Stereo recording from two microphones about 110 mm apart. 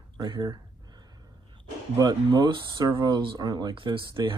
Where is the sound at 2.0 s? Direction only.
35° right (ahead or behind).